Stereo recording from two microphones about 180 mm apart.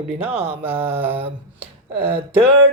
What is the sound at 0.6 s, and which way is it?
Speech, 35° right (ahead or behind).